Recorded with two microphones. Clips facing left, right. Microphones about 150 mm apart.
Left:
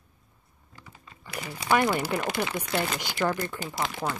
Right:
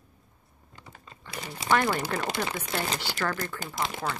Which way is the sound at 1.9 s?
5° left (ahead or behind).